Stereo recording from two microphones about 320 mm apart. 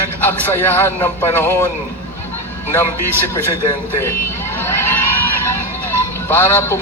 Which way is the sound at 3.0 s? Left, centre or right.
Left.